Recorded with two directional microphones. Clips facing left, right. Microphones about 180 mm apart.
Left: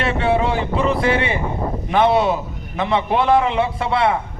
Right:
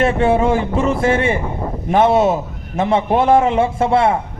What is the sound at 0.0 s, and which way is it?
A man's voice, 50° right (ahead or behind).